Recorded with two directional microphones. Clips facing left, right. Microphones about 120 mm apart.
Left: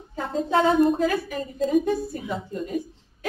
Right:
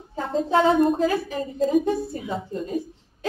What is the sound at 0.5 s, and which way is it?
Speech, 25° right (ahead or behind).